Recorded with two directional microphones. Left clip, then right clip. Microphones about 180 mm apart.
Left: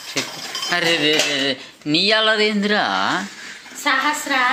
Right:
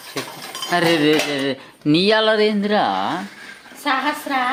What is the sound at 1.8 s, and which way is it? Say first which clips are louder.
Speech: right 1 dB; 50° right (ahead or behind).